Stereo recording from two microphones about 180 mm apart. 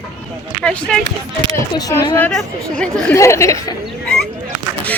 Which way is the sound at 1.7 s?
20° left (ahead or behind).